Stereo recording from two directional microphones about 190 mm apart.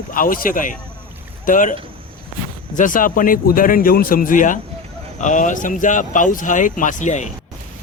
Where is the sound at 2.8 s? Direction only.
45° left (ahead or behind).